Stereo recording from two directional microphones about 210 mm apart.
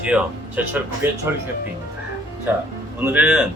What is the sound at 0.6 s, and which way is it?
Speech, 10° right (ahead or behind).